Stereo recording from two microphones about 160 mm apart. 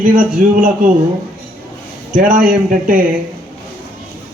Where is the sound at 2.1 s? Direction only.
55° right (ahead or behind).